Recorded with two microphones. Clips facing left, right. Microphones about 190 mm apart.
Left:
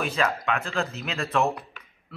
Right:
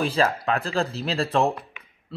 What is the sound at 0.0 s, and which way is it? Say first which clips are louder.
Speech: right 4 dB; 30° right (ahead or behind).